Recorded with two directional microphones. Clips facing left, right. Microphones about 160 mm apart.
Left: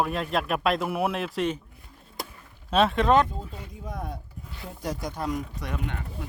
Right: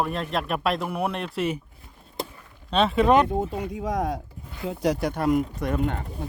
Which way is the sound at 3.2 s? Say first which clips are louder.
Right 12 dB; 70° right (ahead or behind).